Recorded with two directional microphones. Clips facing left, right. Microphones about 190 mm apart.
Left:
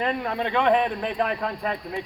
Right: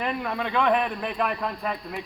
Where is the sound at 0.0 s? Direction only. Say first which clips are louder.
Left 2 dB; 25° left (ahead or behind).